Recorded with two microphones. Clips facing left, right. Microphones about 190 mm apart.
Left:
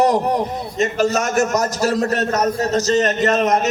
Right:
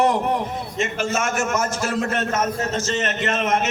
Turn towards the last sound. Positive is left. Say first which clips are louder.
# left 5 dB
turn(degrees=40)  # may be behind; listen again after turning